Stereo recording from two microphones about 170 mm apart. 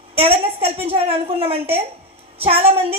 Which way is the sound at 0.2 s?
35° right (ahead or behind).